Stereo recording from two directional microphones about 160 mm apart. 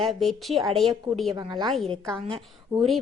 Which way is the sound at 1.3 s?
25° right (ahead or behind).